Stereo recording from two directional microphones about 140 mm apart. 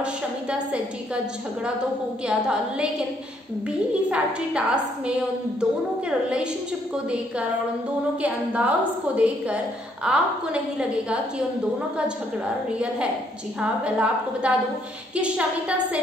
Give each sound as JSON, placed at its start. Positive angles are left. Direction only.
{"t": 0.0, "sound": "a woman's voice", "side_deg": -10}
{"t": 2.2, "sound": "a woman's voice", "side_deg": -5}
{"t": 4.1, "sound": "a woman's voice", "side_deg": -10}
{"t": 8.2, "sound": "a woman's voice", "side_deg": -10}
{"t": 12.7, "sound": "a woman's voice", "side_deg": -10}